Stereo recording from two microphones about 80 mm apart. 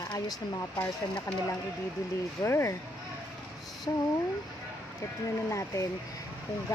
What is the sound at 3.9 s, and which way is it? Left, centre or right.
Speech, left.